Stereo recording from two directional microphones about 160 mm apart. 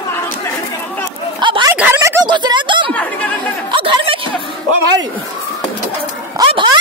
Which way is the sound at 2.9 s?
10° left (ahead or behind).